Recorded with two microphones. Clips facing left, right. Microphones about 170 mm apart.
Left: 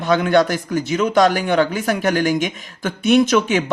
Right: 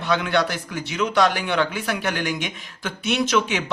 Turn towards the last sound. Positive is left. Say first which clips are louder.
# left 5 dB
turn(degrees=50)  # may be behind; listen again after turning